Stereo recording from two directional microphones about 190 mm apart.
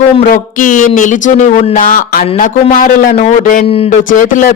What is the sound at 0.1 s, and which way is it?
A man's voice, 35° left (ahead or behind).